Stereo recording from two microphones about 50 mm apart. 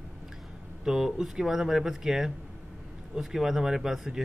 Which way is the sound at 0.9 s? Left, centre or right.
Centre.